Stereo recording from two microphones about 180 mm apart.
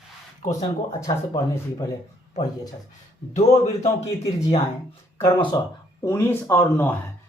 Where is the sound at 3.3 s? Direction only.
40° left (ahead or behind).